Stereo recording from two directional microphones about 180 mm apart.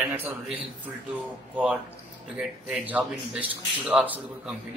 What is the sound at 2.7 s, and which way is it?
Speech, 5° right (ahead or behind).